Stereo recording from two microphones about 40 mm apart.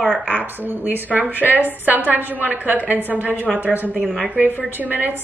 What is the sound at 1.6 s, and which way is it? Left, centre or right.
Speech, right.